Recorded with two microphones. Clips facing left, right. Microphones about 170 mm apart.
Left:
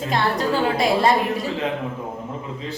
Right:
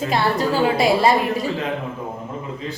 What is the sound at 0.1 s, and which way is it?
A woman's voice, 5° right (ahead or behind).